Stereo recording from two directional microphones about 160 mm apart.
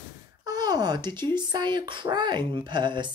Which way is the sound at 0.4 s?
25° right (ahead or behind).